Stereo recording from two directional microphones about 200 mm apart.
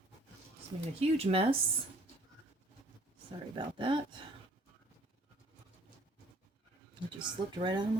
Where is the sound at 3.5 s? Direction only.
25° right (ahead or behind).